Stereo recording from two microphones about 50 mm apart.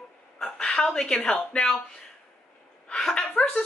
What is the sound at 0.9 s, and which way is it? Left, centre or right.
Speech, centre.